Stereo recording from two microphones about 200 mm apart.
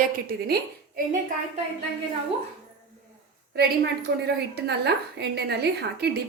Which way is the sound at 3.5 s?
55° right (ahead or behind).